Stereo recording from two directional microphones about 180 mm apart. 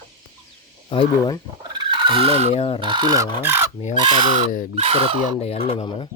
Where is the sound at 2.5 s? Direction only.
30° left (ahead or behind).